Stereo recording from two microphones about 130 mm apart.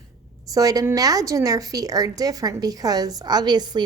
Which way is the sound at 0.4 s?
30° right (ahead or behind).